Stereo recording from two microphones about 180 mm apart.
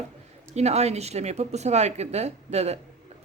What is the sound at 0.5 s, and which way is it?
A woman's voice, 35° right (ahead or behind).